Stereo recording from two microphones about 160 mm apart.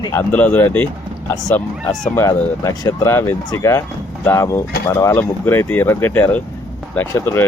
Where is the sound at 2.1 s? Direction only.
20° left (ahead or behind).